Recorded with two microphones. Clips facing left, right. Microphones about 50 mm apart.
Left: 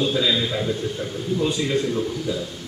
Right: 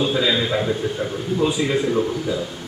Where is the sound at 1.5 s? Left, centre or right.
Centre.